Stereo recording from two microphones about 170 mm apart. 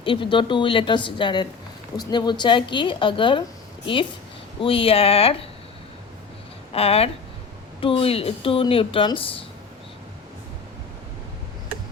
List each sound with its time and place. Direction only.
0.0 s a woman's voice: 30° left (ahead or behind)
4.6 s speech: 35° left (ahead or behind)
6.7 s speech: 35° left (ahead or behind)